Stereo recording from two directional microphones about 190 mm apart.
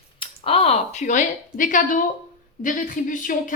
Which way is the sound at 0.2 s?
30° left (ahead or behind).